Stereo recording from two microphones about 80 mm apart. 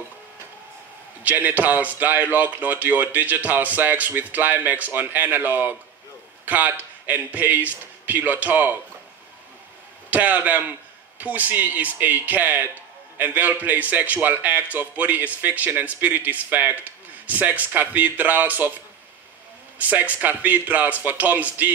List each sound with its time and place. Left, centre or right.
1.2 s a man's voice: right
10.0 s a man's voice: right
19.8 s a man's voice: right